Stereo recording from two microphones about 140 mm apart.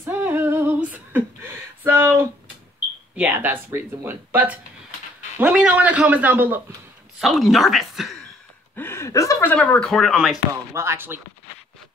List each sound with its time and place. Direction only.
0.0 s female singing: 15° right (ahead or behind)
0.8 s a sound: 10° right (ahead or behind)
3.3 s speech: 15° right (ahead or behind)
7.2 s a woman's voice: centre (ahead or behind)
8.7 s speech: 15° left (ahead or behind); by 10.4 s centre (ahead or behind)
10.5 s speech: 20° right (ahead or behind)